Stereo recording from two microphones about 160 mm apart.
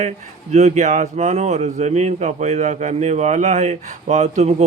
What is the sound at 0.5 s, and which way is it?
Speech, 45° right (ahead or behind).